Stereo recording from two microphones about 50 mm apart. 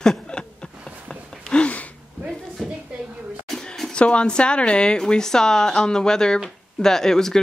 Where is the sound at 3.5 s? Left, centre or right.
Centre.